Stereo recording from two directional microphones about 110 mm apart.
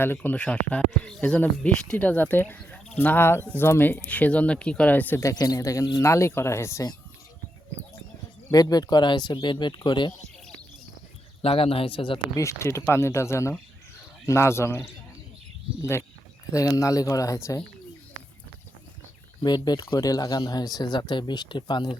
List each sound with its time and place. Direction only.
0.0 s speech: 20° left (ahead or behind)
5.2 s speech: 35° left (ahead or behind)
8.5 s speech: 35° left (ahead or behind)
11.4 s speech: 60° left (ahead or behind)
12.3 s speech: 25° left (ahead or behind)
16.5 s speech: 30° left (ahead or behind)
19.4 s speech: 40° left (ahead or behind)